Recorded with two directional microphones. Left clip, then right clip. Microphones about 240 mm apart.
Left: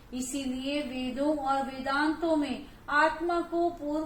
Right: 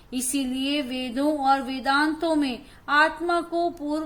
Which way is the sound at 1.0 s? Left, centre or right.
Right.